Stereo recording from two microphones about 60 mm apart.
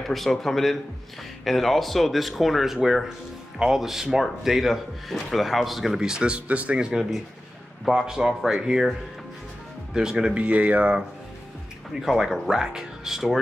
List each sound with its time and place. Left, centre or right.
0.0 s speech: centre
9.9 s speech: centre
11.9 s speech: centre